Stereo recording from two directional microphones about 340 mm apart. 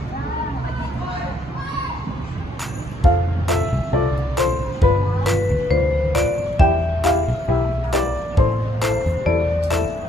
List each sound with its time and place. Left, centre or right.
3.0 s music: centre